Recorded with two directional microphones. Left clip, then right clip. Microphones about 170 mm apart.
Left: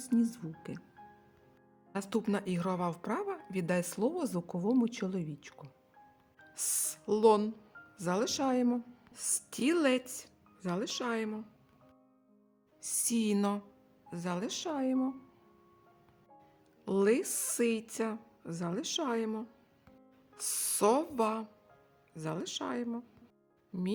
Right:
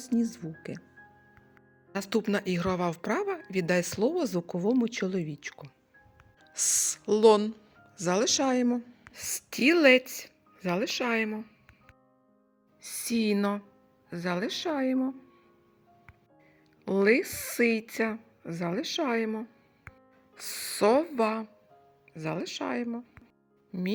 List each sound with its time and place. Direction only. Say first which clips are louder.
0.0 s a woman's voice: right 2 dB; 15° right (ahead or behind)
1.9 s a woman's voice: right 5 dB; 10° right (ahead or behind)
12.8 s a woman's voice: right 4 dB; 10° right (ahead or behind)
16.8 s a woman's voice: right 5 dB; 10° right (ahead or behind)